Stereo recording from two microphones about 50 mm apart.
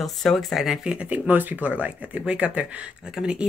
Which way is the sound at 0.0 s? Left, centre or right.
Centre.